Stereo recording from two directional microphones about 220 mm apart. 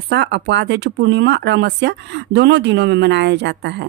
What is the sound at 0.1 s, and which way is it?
Speech, 55° right (ahead or behind).